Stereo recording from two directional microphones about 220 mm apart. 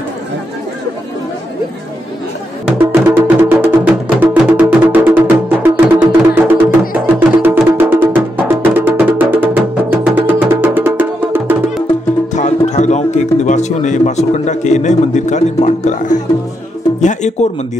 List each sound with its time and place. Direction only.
2.9 s music: 10° right (ahead or behind)
12.4 s music: 35° left (ahead or behind)